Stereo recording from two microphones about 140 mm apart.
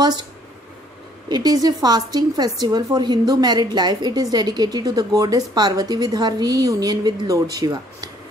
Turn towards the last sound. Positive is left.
turn(degrees=-25)  # may be behind; listen again after turning